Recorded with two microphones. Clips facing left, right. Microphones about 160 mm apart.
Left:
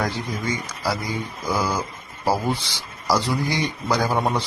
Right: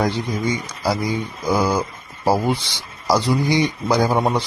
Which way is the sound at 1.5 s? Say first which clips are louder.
Right 5 dB; 25° right (ahead or behind).